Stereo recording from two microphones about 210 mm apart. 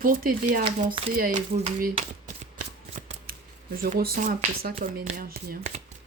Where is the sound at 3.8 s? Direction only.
40° right (ahead or behind).